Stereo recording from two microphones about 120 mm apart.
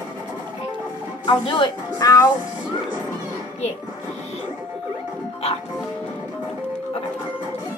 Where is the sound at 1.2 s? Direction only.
45° left (ahead or behind).